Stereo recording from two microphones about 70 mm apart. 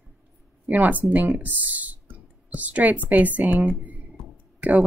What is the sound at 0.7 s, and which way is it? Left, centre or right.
Speech, right.